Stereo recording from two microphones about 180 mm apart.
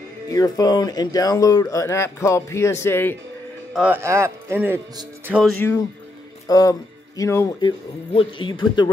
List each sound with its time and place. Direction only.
0.3 s speech: 20° left (ahead or behind)
3.7 s speech: 10° right (ahead or behind)
5.4 s speech: 10° left (ahead or behind)
8.1 s speech: 30° left (ahead or behind)